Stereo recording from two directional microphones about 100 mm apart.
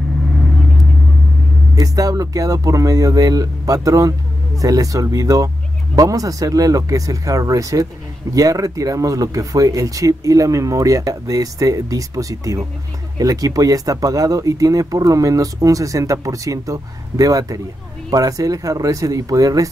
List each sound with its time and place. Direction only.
1.8 s speech: 35° right (ahead or behind)